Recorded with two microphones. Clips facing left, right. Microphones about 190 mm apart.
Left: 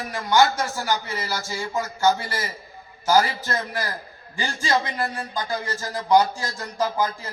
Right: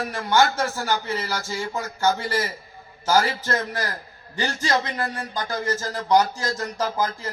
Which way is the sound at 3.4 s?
15° left (ahead or behind).